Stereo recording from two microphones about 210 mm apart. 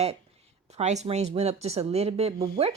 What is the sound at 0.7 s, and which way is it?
A woman's voice, 30° right (ahead or behind).